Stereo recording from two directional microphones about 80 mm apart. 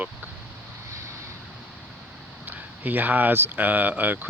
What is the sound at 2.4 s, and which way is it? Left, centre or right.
Speech, right.